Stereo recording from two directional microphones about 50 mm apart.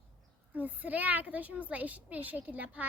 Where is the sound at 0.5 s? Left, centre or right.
Right.